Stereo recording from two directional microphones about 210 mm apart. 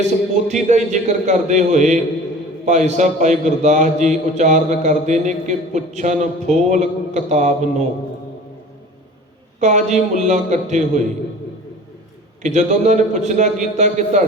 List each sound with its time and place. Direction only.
0.4 s a man's voice: 35° right (ahead or behind)
9.6 s a man's voice: 35° right (ahead or behind)
12.4 s a man's voice: 35° right (ahead or behind)